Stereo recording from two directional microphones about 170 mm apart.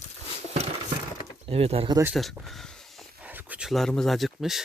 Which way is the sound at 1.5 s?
35° right (ahead or behind).